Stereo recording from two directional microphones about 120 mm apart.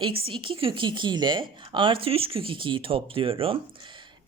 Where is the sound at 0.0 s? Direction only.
50° right (ahead or behind).